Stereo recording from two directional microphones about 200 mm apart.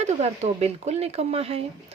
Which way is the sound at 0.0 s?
35° right (ahead or behind).